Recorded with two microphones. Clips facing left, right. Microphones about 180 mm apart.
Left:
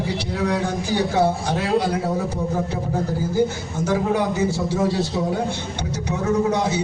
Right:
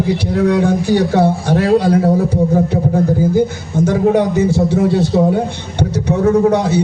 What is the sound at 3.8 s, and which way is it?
A man's voice, 65° right (ahead or behind).